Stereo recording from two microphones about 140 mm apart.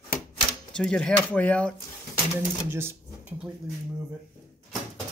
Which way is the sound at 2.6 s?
15° right (ahead or behind).